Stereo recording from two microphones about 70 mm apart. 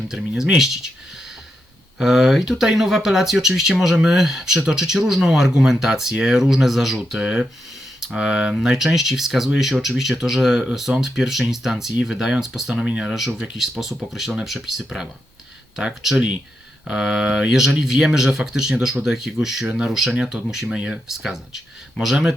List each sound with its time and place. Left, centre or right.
0.1 s speech: centre
2.0 s speech: centre
13.1 s speech: centre
16.1 s speech: centre
21.1 s speech: centre